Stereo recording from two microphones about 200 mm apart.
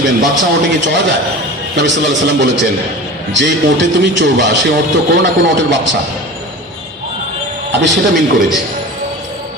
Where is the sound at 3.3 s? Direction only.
60° right (ahead or behind).